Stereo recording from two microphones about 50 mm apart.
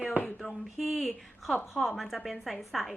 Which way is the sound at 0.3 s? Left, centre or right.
Centre.